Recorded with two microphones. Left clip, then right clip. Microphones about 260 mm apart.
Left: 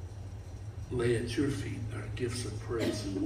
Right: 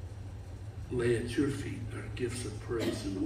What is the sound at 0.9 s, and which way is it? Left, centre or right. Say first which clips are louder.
A man's voice: even; centre.